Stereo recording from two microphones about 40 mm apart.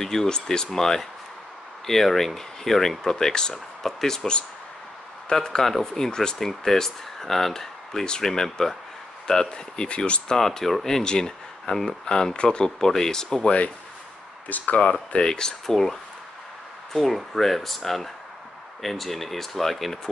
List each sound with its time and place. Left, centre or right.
0.0 s speech: centre
5.3 s speech: centre
5.6 s speech: centre
9.5 s speech: left
10.2 s speech: centre
14.8 s speech: left; by 20.0 s centre